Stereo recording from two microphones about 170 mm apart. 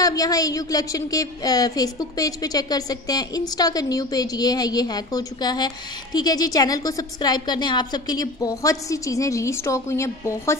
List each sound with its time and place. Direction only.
0.0 s a woman's voice: 20° left (ahead or behind)